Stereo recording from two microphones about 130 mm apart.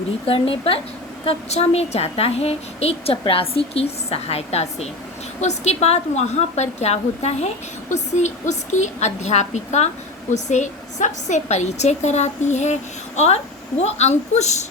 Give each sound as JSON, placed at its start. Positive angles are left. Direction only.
{"t": 0.3, "sound": "a woman's voice", "side_deg": 45}